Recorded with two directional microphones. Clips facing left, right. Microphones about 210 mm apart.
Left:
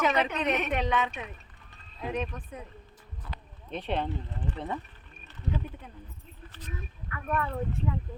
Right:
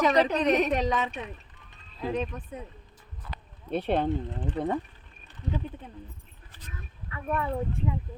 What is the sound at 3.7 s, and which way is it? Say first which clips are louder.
Speech: right 5 dB; 40° right (ahead or behind).